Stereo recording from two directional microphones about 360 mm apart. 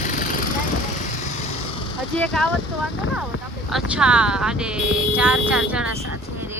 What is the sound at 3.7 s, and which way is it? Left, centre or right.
Speech, centre.